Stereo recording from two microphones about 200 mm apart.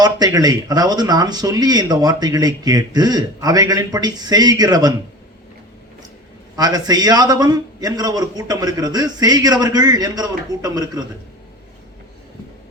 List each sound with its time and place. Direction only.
0.0 s speech: 20° right (ahead or behind)
6.6 s speech: 20° right (ahead or behind)